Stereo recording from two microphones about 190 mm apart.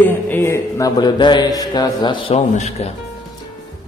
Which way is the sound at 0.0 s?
10° left (ahead or behind).